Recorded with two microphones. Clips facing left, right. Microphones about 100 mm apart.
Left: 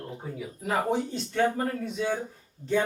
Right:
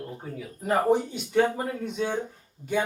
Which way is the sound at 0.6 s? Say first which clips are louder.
Right 3 dB; 5° left (ahead or behind).